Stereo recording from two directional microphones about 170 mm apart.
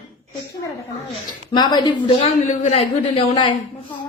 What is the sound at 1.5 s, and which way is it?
Speech, 25° left (ahead or behind).